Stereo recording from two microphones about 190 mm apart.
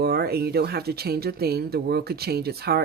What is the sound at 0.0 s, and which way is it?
Speech, 55° right (ahead or behind).